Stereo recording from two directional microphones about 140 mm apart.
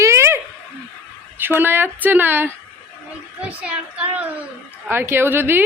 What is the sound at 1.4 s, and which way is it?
A woman's voice, 15° right (ahead or behind).